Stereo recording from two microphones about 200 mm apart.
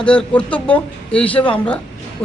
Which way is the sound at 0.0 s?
5° left (ahead or behind).